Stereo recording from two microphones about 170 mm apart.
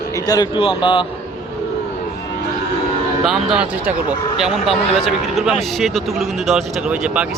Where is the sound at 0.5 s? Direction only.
30° left (ahead or behind).